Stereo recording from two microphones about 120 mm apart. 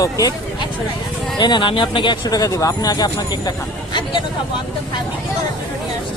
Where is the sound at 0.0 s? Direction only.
30° left (ahead or behind).